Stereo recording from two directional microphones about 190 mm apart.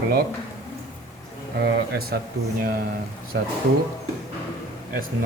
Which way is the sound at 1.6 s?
55° right (ahead or behind).